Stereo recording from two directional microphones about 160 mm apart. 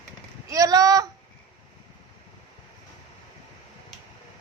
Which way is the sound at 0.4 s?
20° right (ahead or behind).